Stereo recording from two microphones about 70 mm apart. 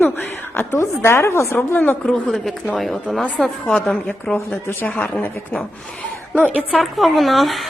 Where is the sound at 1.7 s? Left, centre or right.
Left.